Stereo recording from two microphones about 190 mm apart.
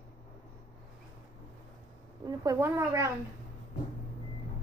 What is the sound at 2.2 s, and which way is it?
Speech, 20° right (ahead or behind).